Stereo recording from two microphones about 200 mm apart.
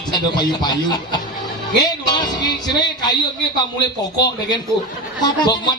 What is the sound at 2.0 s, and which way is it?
Music, 20° left (ahead or behind).